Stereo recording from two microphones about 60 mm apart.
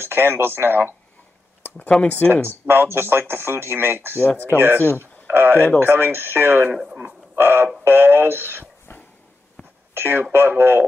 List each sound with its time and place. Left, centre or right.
0.0 s speech: right
1.9 s speech: left
2.6 s speech: right
6.7 s speech: centre
7.3 s speech: right
9.9 s speech: right